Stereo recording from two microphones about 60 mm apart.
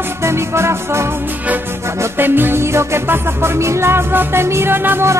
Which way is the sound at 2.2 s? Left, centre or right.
Right.